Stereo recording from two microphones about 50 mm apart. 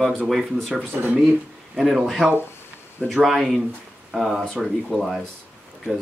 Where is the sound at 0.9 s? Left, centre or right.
Right.